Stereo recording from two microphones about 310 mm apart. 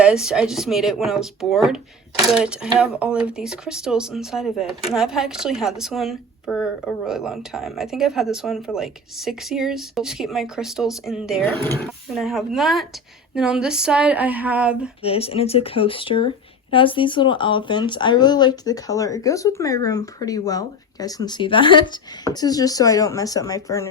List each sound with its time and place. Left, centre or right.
0.0 s speech: centre
15.0 s speech: centre